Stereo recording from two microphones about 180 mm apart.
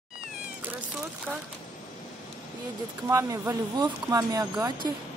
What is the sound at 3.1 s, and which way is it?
Speech, 15° right (ahead or behind).